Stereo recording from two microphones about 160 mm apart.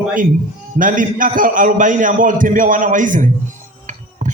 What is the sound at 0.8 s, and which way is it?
A man's voice, 55° right (ahead or behind).